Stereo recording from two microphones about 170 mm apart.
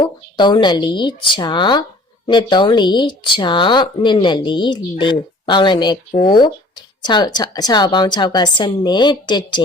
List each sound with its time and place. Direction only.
0.0 s speech: 30° left (ahead or behind)